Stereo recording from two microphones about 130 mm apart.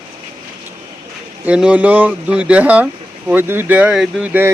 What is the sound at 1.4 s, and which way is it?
Speech, 10° right (ahead or behind).